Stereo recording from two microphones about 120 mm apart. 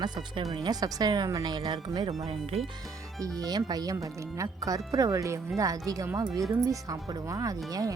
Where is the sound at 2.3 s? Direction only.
55° right (ahead or behind).